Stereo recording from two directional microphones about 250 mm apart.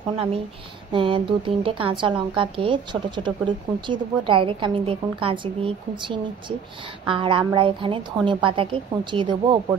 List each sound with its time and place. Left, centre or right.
0.9 s a woman's voice: centre